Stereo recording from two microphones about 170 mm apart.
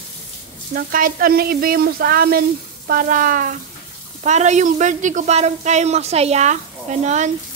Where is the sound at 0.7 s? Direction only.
55° right (ahead or behind).